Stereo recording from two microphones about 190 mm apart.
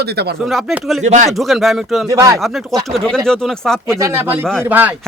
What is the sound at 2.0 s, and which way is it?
Speech, 15° right (ahead or behind).